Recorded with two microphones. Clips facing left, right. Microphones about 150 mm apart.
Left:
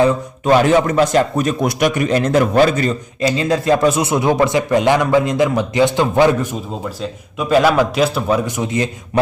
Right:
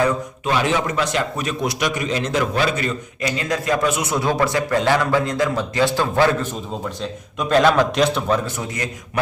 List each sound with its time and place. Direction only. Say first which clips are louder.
0.4 s a man's voice: left 8 dB; 45° left (ahead or behind)
4.1 s a man's voice: left 5 dB; 20° left (ahead or behind)